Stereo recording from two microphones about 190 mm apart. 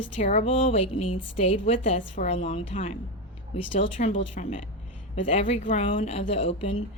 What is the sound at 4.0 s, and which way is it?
Speech, 40° left (ahead or behind).